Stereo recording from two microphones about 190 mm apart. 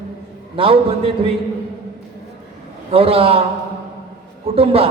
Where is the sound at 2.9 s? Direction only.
30° right (ahead or behind).